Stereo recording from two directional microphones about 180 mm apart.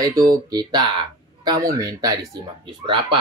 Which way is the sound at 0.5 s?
20° right (ahead or behind).